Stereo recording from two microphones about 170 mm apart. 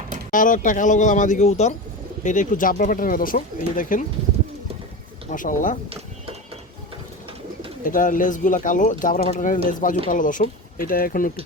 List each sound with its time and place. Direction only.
0.3 s speech: 50° left (ahead or behind)
5.3 s speech: 50° left (ahead or behind)
7.9 s speech: 50° left (ahead or behind)